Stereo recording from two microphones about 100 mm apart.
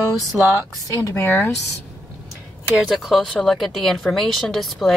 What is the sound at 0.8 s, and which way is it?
Speech, 35° left (ahead or behind).